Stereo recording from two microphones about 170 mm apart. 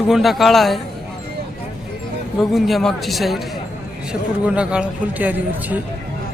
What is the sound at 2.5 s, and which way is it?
Speech, centre (ahead or behind).